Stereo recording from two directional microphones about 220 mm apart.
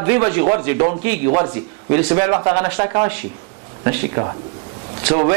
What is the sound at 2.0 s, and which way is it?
A man's voice, 20° right (ahead or behind).